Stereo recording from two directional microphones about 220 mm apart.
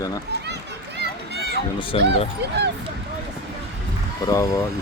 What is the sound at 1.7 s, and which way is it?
Speech, 25° left (ahead or behind).